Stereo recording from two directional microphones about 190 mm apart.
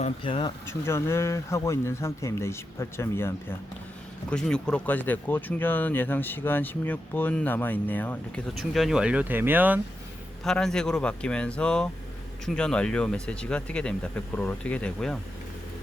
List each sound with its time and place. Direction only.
0.0 s speech: 25° left (ahead or behind)
0.7 s speech: 15° left (ahead or behind)
8.7 s speech: centre (ahead or behind)
10.4 s speech: 5° left (ahead or behind)